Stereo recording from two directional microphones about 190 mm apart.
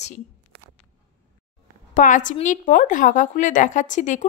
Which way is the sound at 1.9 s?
40° left (ahead or behind).